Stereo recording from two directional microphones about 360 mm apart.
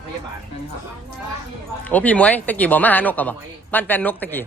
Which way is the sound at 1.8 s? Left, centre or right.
Centre.